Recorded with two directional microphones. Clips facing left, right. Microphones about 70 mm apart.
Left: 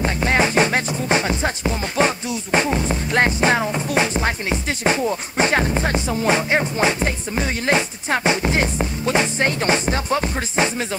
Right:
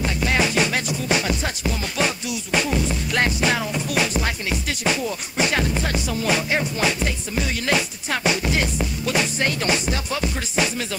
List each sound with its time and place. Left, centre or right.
0.0 s music: left